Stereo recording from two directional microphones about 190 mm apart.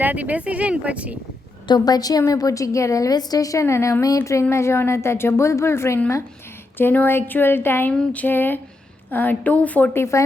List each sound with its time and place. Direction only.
0.0 s speech: 10° right (ahead or behind)
1.6 s a woman's voice: 20° left (ahead or behind)